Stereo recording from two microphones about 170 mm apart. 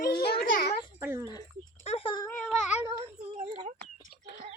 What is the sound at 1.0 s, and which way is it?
Speech, 15° right (ahead or behind).